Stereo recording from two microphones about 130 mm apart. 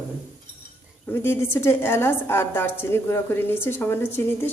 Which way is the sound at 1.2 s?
20° left (ahead or behind).